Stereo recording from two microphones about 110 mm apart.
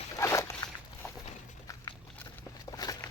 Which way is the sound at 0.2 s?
25° left (ahead or behind).